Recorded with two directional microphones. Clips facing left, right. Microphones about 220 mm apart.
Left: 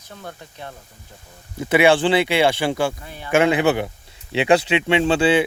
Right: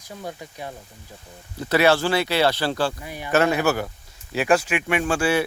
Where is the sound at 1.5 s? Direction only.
20° left (ahead or behind).